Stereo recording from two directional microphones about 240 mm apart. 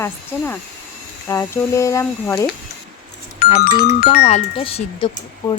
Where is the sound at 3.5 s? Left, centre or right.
Left.